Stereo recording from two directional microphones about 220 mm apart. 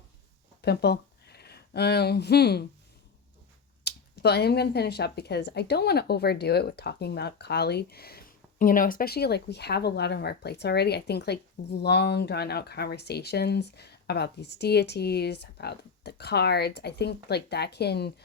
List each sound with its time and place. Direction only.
0.6 s speech: 50° left (ahead or behind)
3.8 s speech: 50° left (ahead or behind)